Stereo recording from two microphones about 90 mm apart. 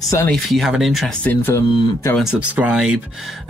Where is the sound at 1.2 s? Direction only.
20° left (ahead or behind).